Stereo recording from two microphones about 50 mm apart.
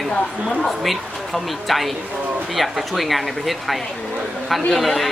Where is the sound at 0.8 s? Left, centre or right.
Centre.